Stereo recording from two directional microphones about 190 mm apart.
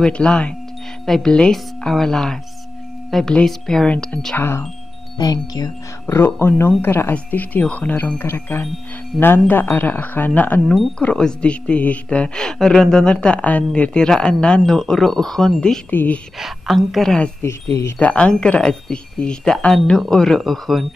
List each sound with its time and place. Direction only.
0.0 s speech: 5° left (ahead or behind)